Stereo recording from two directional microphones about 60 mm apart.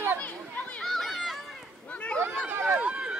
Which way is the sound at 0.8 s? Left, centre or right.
Centre.